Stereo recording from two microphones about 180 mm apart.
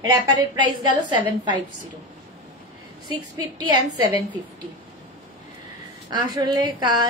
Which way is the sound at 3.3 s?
20° right (ahead or behind).